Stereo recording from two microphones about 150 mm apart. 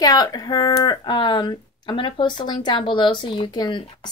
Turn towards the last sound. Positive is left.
turn(degrees=30)  # may be behind; listen again after turning